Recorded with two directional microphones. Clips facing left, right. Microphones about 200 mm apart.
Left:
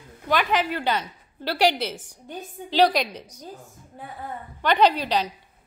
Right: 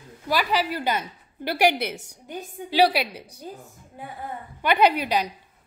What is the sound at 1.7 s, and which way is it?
Speech, 60° right (ahead or behind).